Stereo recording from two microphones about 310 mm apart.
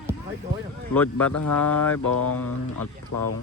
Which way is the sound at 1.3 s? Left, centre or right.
Left.